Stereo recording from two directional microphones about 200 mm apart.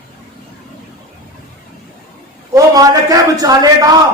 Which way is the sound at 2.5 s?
20° right (ahead or behind).